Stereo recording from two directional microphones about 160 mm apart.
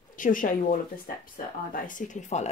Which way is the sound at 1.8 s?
55° left (ahead or behind).